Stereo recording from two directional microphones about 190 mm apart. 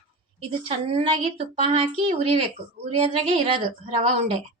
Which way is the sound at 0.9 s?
35° right (ahead or behind).